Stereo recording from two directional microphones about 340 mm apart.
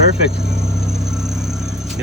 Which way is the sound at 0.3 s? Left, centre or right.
Centre.